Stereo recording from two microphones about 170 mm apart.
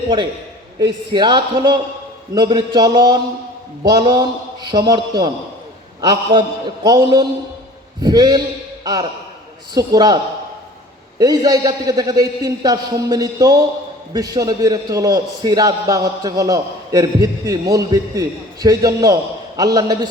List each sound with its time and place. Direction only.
0.8 s a man's voice: 25° right (ahead or behind)
11.2 s a man's voice: 25° right (ahead or behind)